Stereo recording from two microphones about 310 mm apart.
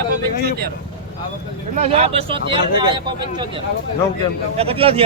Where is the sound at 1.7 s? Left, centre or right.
Right.